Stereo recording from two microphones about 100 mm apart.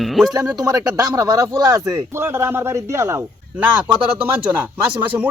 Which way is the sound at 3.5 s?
15° right (ahead or behind).